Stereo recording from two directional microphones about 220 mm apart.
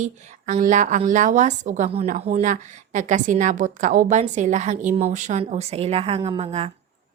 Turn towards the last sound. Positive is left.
turn(degrees=-25)  # may be behind; listen again after turning